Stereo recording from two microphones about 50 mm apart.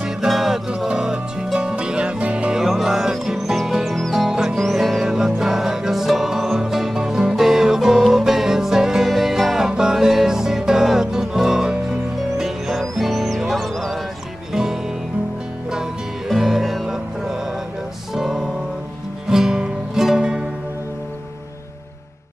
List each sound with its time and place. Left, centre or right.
0.3 s music: centre; by 2.5 s right
2.5 s music: centre
16.3 s music: centre